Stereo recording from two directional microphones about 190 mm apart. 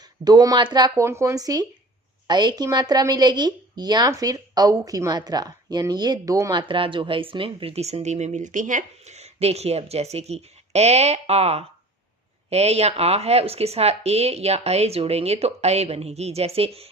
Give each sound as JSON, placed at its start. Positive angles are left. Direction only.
{"t": 0.3, "sound": "speech", "side_deg": -20}